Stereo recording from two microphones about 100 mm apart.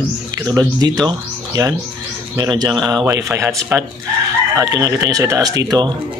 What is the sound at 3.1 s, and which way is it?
Speech, 30° right (ahead or behind).